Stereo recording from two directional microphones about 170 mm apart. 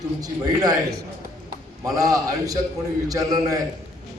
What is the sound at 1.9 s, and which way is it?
A man's voice, 20° right (ahead or behind).